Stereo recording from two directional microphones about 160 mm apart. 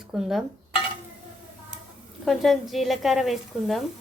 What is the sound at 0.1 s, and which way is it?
Frying, centre (ahead or behind).